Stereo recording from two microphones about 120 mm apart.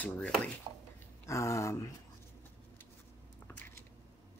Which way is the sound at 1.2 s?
25° left (ahead or behind).